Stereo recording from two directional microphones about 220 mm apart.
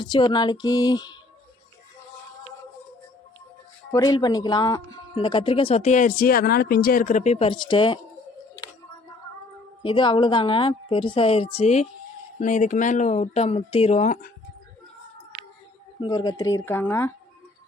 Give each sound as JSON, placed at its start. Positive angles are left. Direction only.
{"t": 0.0, "sound": "speech", "side_deg": 20}
{"t": 3.9, "sound": "speech", "side_deg": 20}
{"t": 9.8, "sound": "speech", "side_deg": 20}
{"t": 16.0, "sound": "speech", "side_deg": 20}